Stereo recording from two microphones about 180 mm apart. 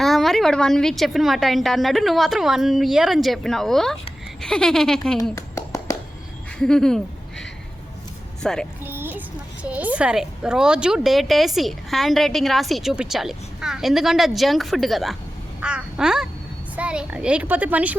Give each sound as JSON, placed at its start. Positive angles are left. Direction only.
{"t": 0.0, "sound": "a woman's voice", "side_deg": 0}
{"t": 5.3, "sound": "a sound", "side_deg": 15}
{"t": 6.6, "sound": "speech", "side_deg": 5}
{"t": 8.8, "sound": "a woman's voice", "side_deg": -10}